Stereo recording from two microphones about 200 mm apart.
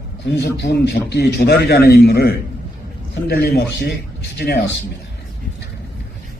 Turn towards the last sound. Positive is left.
turn(degrees=55)  # may be behind; listen again after turning